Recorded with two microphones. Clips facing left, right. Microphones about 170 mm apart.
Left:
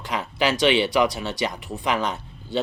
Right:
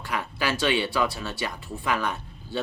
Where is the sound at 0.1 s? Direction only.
20° left (ahead or behind).